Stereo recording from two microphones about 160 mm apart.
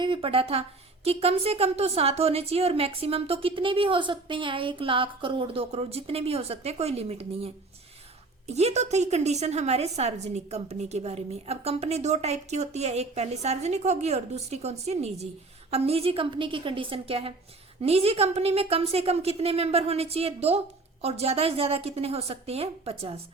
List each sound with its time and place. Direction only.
0.0 s a woman's voice: 35° right (ahead or behind)